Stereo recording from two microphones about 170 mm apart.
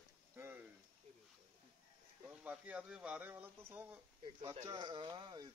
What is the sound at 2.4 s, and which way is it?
Speech, 5° right (ahead or behind).